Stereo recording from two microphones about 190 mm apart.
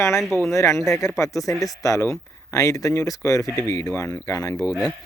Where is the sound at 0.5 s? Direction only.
15° left (ahead or behind).